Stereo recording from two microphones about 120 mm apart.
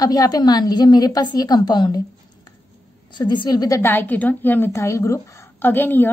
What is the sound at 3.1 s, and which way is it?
Speech, 40° left (ahead or behind).